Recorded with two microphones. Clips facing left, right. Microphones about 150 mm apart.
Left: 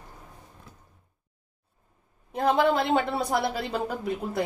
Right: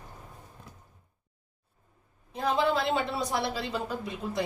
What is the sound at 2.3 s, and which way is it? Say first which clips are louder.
A woman's voice: left 4 dB; 60° left (ahead or behind).